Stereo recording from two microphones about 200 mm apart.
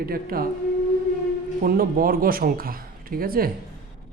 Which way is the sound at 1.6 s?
45° right (ahead or behind).